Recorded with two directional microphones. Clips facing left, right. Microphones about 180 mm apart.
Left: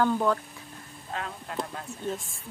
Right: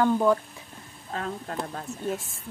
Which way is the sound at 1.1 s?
40° right (ahead or behind).